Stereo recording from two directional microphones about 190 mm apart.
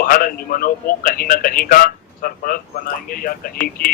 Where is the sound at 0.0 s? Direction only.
50° left (ahead or behind).